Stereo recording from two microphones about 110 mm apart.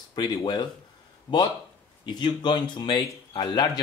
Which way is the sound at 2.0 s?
45° left (ahead or behind).